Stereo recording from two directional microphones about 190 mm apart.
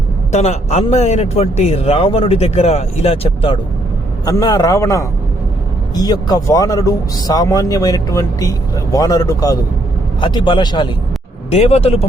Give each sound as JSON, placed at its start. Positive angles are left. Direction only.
{"t": 0.3, "sound": "a man's voice", "side_deg": 35}
{"t": 4.3, "sound": "a man's voice", "side_deg": 20}